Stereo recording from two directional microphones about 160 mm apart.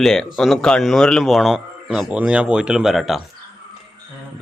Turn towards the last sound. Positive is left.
turn(degrees=0)  # may be behind; listen again after turning